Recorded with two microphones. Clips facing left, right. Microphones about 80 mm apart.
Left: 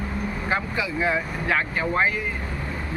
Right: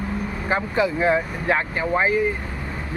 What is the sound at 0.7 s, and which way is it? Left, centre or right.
Speech, right.